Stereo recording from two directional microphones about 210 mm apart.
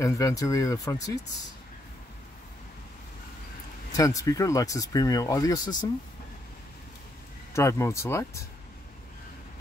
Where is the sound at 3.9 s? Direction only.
15° left (ahead or behind).